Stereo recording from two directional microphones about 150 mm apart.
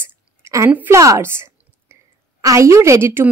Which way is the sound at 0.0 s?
20° right (ahead or behind).